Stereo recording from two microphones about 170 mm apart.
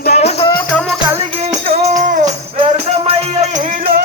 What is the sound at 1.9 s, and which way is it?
Music, 45° right (ahead or behind).